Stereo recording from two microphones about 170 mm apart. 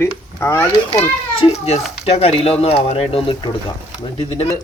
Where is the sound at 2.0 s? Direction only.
35° left (ahead or behind).